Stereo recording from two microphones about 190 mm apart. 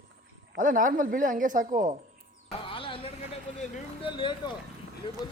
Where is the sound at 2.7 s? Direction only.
30° left (ahead or behind).